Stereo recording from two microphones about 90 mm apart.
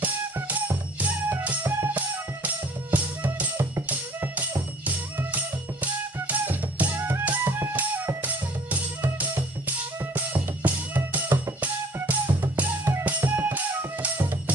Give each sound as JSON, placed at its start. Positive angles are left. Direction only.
{"t": 0.0, "sound": "music", "side_deg": -20}
{"t": 6.2, "sound": "music", "side_deg": -20}